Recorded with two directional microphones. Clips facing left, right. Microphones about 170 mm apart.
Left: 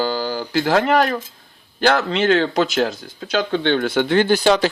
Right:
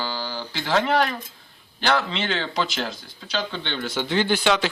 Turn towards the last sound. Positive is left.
turn(degrees=40)  # may be behind; listen again after turning